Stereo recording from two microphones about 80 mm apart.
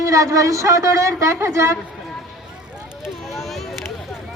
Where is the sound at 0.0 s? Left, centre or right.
Right.